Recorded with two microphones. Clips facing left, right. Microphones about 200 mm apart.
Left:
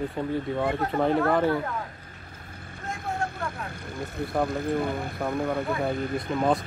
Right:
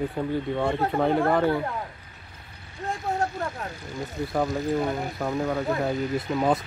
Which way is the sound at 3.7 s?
55° left (ahead or behind).